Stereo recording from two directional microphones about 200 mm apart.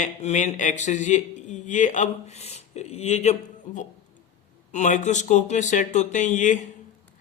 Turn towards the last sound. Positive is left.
turn(degrees=40)  # may be behind; listen again after turning